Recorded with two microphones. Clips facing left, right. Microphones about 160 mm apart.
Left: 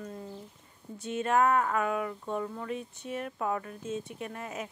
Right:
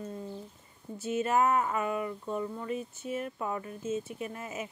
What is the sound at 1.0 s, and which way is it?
Speech, 5° right (ahead or behind).